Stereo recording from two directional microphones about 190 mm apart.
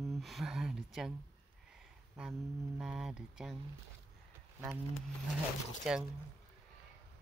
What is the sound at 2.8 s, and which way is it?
Speech, centre (ahead or behind).